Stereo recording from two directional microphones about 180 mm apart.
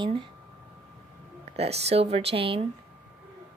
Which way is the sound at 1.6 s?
35° right (ahead or behind).